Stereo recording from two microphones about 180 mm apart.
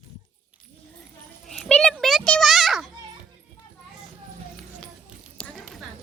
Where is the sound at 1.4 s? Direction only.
5° left (ahead or behind).